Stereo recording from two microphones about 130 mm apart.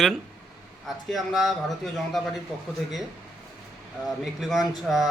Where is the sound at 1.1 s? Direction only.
Centre (ahead or behind).